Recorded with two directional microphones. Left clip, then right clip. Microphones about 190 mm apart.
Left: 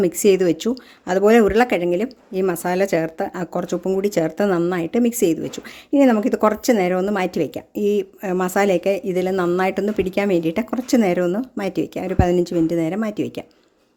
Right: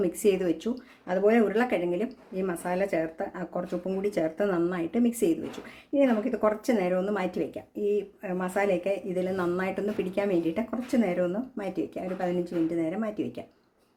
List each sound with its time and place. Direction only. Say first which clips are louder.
0.0 s speech: left 9 dB; 45° left (ahead or behind)
5.9 s speech: left 9 dB; 60° left (ahead or behind)